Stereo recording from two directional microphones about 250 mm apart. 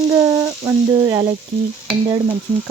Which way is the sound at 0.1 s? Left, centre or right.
Centre.